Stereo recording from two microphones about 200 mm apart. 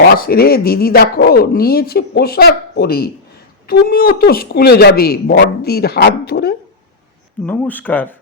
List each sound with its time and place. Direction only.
0.2 s speech: 50° left (ahead or behind)
7.4 s speech: 10° left (ahead or behind)